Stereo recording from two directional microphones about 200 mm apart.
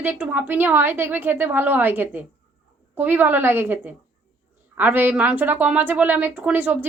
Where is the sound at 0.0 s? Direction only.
10° right (ahead or behind).